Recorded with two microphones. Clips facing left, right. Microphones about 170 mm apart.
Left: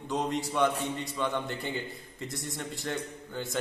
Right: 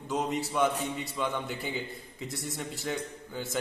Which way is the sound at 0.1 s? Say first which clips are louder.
Even; centre (ahead or behind).